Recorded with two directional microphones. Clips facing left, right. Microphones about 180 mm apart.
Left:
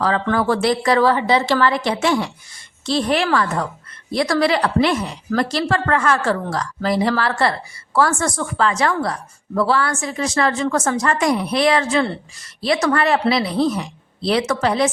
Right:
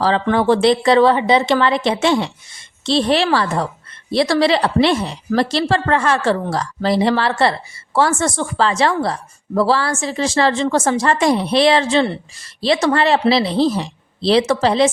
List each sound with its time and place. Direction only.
0.0 s a woman's voice: 25° right (ahead or behind)